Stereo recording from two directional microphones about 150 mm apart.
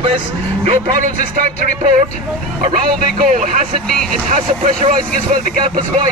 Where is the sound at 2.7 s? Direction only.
60° right (ahead or behind).